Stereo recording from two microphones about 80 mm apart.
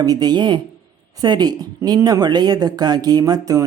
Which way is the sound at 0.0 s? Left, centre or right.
Right.